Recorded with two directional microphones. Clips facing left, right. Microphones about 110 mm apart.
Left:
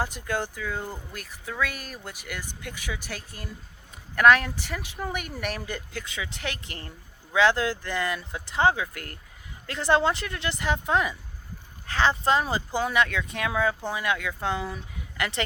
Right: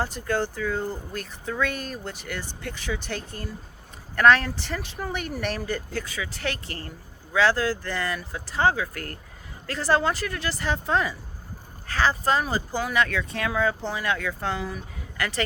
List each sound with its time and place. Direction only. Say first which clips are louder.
0.0 s speech: right 3 dB; 15° left (ahead or behind)